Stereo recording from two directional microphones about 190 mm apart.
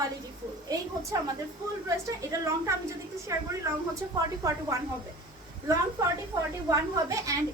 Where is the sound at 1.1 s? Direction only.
20° right (ahead or behind).